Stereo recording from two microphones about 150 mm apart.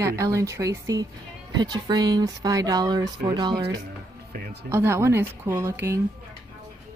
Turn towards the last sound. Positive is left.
turn(degrees=-20)  # may be behind; listen again after turning